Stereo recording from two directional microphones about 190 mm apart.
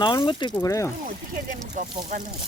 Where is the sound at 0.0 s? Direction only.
25° left (ahead or behind).